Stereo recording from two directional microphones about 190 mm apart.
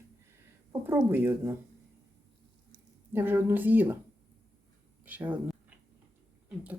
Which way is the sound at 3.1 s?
10° right (ahead or behind).